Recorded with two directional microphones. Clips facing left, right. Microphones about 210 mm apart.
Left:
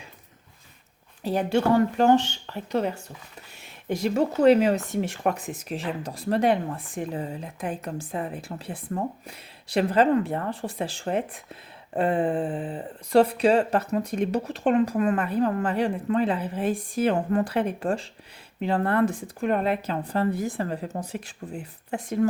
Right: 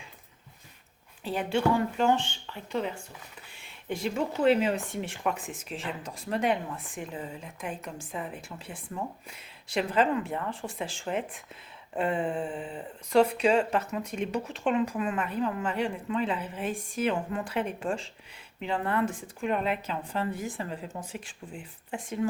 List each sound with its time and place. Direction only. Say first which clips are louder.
1.2 s speech: left 4 dB; 40° left (ahead or behind)
3.6 s a sound: left 5 dB; 40° left (ahead or behind)
4.4 s speech: left 6 dB; 40° left (ahead or behind)